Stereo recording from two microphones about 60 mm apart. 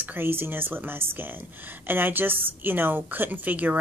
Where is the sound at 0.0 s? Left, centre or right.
Right.